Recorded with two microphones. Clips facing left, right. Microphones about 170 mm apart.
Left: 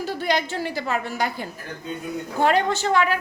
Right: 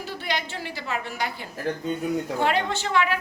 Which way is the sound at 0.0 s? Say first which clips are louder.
Left 6 dB; 40° left (ahead or behind).